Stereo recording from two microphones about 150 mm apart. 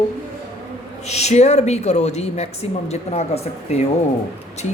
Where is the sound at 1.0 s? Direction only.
45° left (ahead or behind).